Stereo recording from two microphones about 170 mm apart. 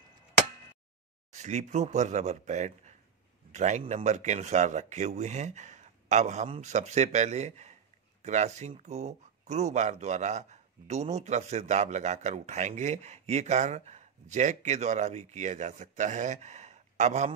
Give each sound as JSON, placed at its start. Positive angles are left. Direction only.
{"t": 1.3, "sound": "speech", "side_deg": -45}